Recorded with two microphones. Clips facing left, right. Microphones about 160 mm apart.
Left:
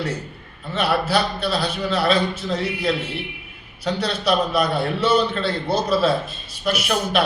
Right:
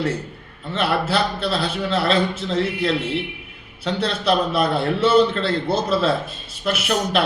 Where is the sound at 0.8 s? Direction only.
25° right (ahead or behind).